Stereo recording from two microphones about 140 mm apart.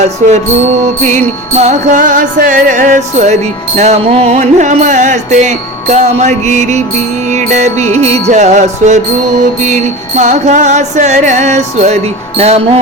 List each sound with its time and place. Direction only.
1.0 s music: 55° right (ahead or behind)
3.8 s music: 50° right (ahead or behind)
12.4 s speech: 50° right (ahead or behind)